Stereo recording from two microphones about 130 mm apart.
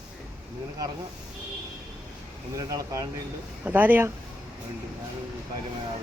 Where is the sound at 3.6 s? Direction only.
15° right (ahead or behind).